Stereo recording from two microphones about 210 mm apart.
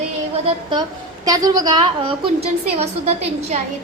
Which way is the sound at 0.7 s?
20° right (ahead or behind).